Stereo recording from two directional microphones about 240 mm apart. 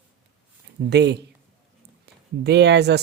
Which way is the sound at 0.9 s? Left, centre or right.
Right.